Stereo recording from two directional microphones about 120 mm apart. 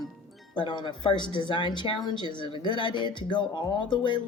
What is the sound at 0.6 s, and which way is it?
Speech, 40° left (ahead or behind).